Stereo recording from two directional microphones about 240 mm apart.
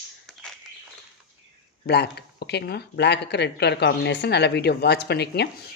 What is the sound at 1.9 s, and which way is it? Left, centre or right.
Speech, left.